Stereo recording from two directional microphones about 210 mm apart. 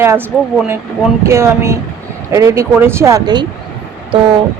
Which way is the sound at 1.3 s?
15° right (ahead or behind).